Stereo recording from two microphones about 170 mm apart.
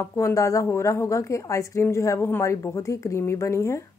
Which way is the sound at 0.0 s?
20° left (ahead or behind).